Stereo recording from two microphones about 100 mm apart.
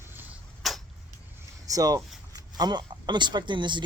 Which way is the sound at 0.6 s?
Centre (ahead or behind).